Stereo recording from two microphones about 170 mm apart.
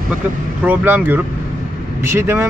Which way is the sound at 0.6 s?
10° right (ahead or behind).